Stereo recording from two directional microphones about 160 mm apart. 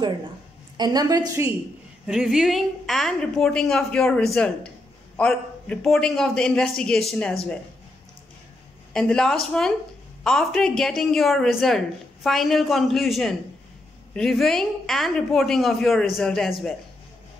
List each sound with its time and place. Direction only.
0.7 s a woman's voice: 25° right (ahead or behind)
2.0 s a woman's voice: 5° right (ahead or behind)
8.9 s a woman's voice: 5° left (ahead or behind)